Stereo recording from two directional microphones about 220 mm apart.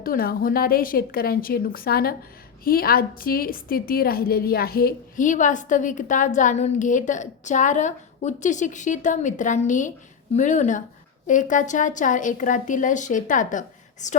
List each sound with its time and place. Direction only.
0.0 s a woman's voice: 40° left (ahead or behind)